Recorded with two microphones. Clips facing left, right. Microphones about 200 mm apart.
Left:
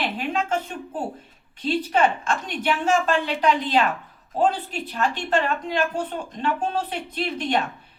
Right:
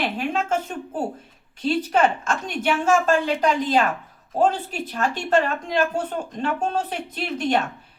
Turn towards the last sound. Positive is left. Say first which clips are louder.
# right 2 dB
turn(degrees=-45)  # may be behind; listen again after turning